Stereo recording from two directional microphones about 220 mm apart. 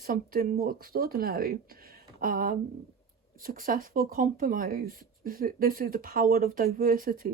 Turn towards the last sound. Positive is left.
turn(degrees=-40)  # may be behind; listen again after turning